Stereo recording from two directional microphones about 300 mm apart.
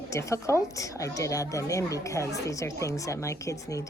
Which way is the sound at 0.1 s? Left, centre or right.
Centre.